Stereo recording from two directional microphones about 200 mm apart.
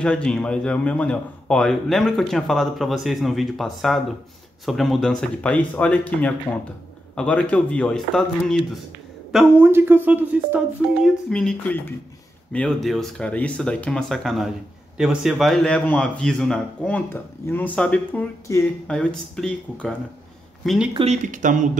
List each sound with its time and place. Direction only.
0.0 s a man's voice: 5° left (ahead or behind)
11.1 s a man's voice: 5° left (ahead or behind)
20.9 s speech: 35° right (ahead or behind)